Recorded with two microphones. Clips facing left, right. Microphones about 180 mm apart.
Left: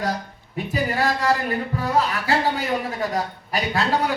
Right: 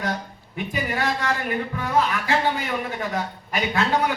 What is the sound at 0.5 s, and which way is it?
A man's voice, 35° left (ahead or behind).